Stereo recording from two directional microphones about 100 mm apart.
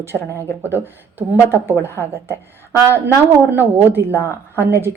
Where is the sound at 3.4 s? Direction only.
20° right (ahead or behind).